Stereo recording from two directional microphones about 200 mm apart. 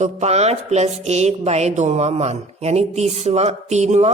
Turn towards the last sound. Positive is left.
turn(degrees=-35)  # may be behind; listen again after turning